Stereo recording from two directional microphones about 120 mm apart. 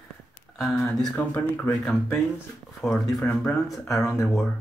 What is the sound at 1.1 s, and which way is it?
Speech, 20° left (ahead or behind).